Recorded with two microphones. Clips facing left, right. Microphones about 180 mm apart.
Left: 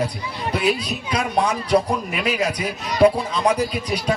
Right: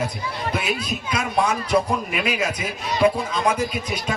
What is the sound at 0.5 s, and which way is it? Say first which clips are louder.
A man's voice: left 7 dB; 35° left (ahead or behind).